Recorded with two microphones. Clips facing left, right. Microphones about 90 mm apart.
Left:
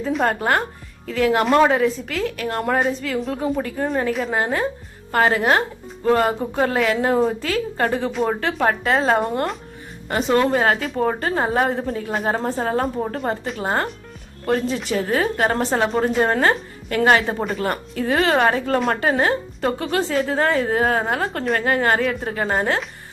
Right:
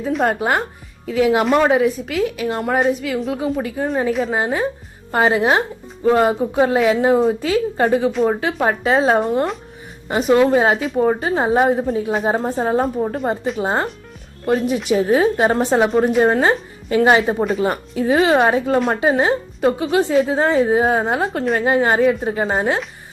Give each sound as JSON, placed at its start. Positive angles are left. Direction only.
{"t": 0.3, "sound": "speech", "side_deg": -15}
{"t": 1.5, "sound": "a woman's voice", "side_deg": 0}
{"t": 1.7, "sound": "a woman's voice", "side_deg": -10}
{"t": 9.2, "sound": "a woman's voice", "side_deg": -5}
{"t": 10.1, "sound": "speech", "side_deg": -15}
{"t": 12.8, "sound": "a woman's voice", "side_deg": 0}
{"t": 13.6, "sound": "a woman's voice", "side_deg": -20}
{"t": 17.3, "sound": "a woman's voice", "side_deg": 0}
{"t": 17.6, "sound": "speech", "side_deg": -15}
{"t": 21.2, "sound": "a woman's voice", "side_deg": 0}
{"t": 21.6, "sound": "speech", "side_deg": -15}